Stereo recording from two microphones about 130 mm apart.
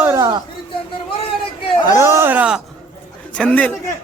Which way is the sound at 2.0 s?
20° right (ahead or behind).